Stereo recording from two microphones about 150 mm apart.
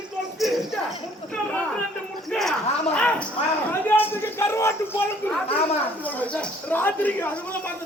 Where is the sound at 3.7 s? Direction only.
15° left (ahead or behind).